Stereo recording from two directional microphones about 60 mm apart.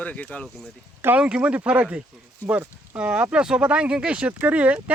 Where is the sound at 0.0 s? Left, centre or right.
Left.